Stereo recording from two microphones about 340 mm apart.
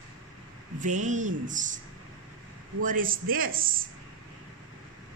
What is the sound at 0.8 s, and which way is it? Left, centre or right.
Speech, right.